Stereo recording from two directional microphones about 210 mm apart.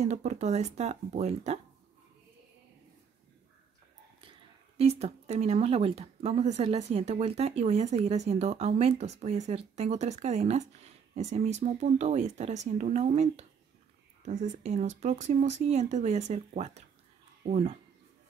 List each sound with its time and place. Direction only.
0.0 s speech: 30° right (ahead or behind)
4.2 s speech: 25° right (ahead or behind)